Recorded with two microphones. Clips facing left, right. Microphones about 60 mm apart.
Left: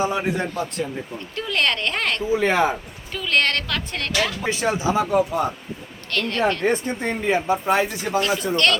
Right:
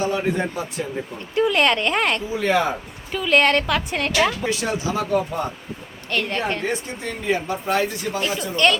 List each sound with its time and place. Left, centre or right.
0.0 s speech: centre
0.3 s a man's voice: centre
1.4 s speech: centre
2.4 s speech: left
3.1 s a woman's voice: centre
4.4 s speech: left
6.1 s speech: centre
6.6 s speech: left
8.5 s a woman's voice: centre